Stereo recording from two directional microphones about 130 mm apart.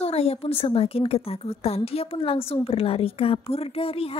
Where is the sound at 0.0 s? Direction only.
50° left (ahead or behind).